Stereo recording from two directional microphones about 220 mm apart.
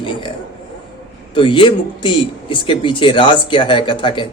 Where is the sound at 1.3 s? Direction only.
20° left (ahead or behind).